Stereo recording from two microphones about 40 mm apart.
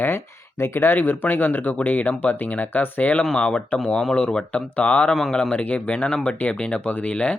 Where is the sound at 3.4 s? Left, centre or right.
Left.